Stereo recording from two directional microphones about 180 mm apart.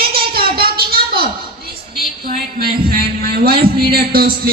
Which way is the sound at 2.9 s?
60° right (ahead or behind).